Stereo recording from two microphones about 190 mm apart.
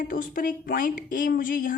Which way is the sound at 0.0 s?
45° left (ahead or behind).